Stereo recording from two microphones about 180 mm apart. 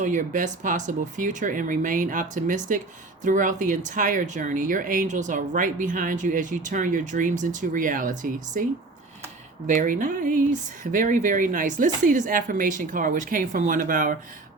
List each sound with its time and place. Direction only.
0.0 s speech: 45° right (ahead or behind)
9.6 s speech: 50° right (ahead or behind)